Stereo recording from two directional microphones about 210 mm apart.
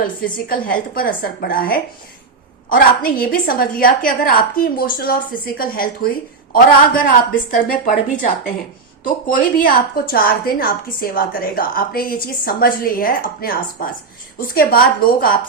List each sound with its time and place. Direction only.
0.0 s a woman's voice: 45° left (ahead or behind)
9.3 s a woman's voice: 40° left (ahead or behind)